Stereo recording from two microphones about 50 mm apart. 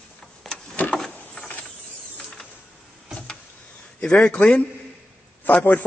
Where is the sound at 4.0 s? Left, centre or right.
Left.